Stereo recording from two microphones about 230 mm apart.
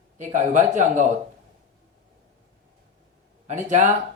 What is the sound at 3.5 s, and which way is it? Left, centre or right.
Speech, right.